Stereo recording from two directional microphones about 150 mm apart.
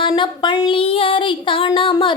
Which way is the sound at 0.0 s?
30° left (ahead or behind).